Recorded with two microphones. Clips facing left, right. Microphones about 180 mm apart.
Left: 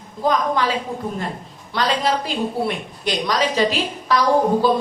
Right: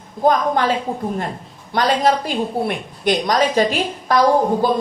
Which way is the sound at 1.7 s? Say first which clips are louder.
Right 4 dB; 50° right (ahead or behind).